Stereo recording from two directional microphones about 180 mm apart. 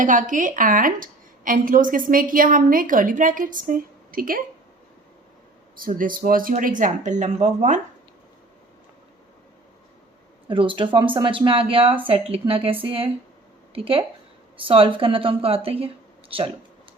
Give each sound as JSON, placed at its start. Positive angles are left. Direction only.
{"t": 0.0, "sound": "a woman's voice", "side_deg": -45}
{"t": 5.8, "sound": "a woman's voice", "side_deg": -50}
{"t": 10.5, "sound": "speech", "side_deg": -30}